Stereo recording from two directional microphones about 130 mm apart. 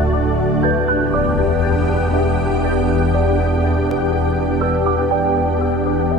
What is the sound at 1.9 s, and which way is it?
Music, centre (ahead or behind).